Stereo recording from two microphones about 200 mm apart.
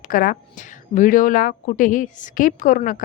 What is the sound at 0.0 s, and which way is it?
A woman's voice, 45° left (ahead or behind).